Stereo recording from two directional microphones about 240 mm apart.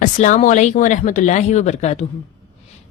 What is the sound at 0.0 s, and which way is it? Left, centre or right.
A woman's voice, left.